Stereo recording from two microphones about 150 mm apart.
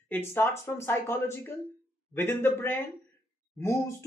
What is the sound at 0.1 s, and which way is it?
Speech, 15° left (ahead or behind).